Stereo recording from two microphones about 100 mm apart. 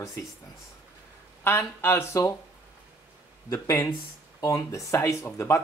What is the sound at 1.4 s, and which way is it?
Speech, 25° left (ahead or behind).